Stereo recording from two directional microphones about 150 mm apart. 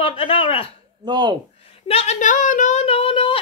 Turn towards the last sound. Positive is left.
turn(degrees=35)  # may be behind; listen again after turning